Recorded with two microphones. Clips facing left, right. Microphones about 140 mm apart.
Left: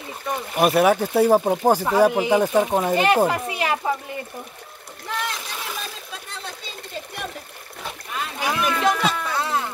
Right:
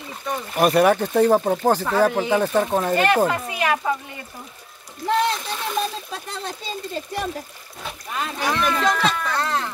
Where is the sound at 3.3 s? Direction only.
30° left (ahead or behind).